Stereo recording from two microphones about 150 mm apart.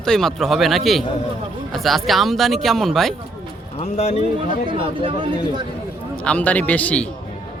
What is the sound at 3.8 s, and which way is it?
Speech, 50° left (ahead or behind).